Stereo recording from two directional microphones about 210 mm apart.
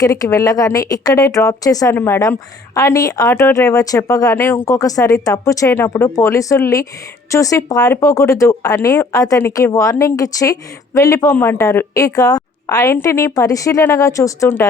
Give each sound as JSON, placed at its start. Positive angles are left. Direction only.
{"t": 0.0, "sound": "a woman's voice", "side_deg": 15}